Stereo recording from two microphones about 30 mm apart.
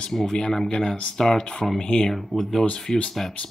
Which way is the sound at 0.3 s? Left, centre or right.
Left.